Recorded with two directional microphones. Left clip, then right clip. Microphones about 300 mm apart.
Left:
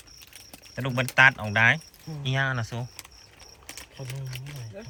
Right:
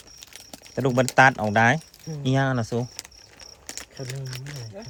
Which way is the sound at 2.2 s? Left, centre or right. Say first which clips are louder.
Right 3 dB; right.